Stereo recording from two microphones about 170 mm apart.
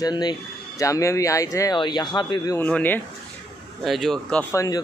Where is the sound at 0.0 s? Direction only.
25° left (ahead or behind).